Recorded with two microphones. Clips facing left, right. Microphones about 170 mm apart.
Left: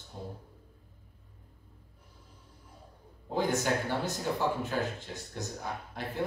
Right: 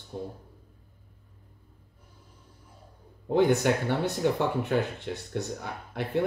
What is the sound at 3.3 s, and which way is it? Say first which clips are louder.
Speech: right 7 dB; 65° right (ahead or behind).